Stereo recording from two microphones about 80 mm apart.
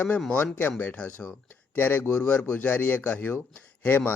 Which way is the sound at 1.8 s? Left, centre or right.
Left.